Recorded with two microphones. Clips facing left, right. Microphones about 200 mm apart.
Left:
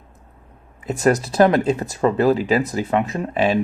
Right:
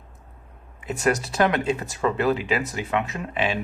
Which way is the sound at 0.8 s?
40° left (ahead or behind).